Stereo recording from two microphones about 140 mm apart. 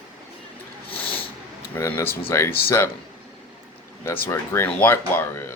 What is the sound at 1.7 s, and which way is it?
Speech, 20° left (ahead or behind).